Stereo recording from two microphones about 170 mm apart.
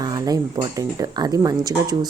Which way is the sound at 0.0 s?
25° right (ahead or behind).